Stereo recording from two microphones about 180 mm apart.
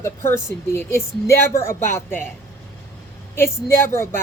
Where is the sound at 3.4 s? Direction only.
15° left (ahead or behind).